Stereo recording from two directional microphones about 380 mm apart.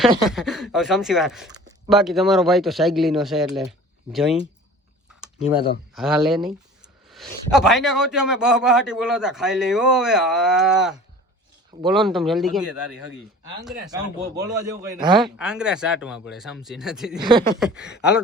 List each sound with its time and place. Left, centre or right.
0.3 s speech: centre
5.9 s speech: centre
12.8 s speech: left
13.6 s a man's voice: centre
17.4 s speech: centre